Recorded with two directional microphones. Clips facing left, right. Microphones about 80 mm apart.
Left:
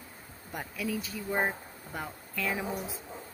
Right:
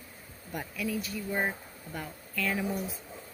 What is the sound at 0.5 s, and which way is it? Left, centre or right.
Speech, left.